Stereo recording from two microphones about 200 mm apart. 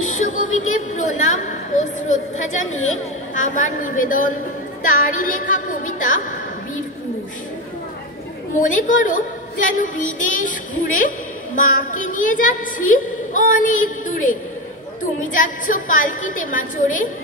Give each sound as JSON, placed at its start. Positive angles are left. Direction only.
{"t": 0.1, "sound": "music", "side_deg": 40}
{"t": 0.9, "sound": "a sound", "side_deg": 40}
{"t": 3.3, "sound": "a woman's voice", "side_deg": 40}
{"t": 4.8, "sound": "music", "side_deg": 45}
{"t": 8.5, "sound": "a woman's voice", "side_deg": 40}
{"t": 15.3, "sound": "a woman's voice", "side_deg": 40}